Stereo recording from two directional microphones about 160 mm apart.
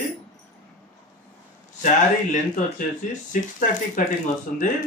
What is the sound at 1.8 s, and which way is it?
Speech, 50° left (ahead or behind).